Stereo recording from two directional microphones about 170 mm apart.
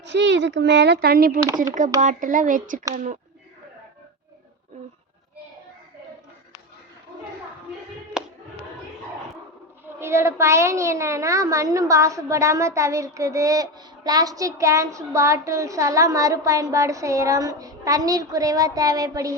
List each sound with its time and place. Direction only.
0.0 s a child's voice: 90° right; by 1.4 s 65° right (ahead or behind)
2.0 s speech: 50° right (ahead or behind)
8.2 s a sound: 5° right (ahead or behind)
10.0 s a woman's voice: 15° right (ahead or behind)